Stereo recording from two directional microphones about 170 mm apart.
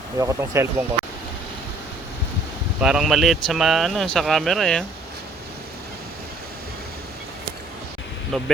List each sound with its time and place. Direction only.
0.2 s speech: 20° right (ahead or behind)
2.8 s speech: 5° right (ahead or behind)
8.3 s speech: centre (ahead or behind)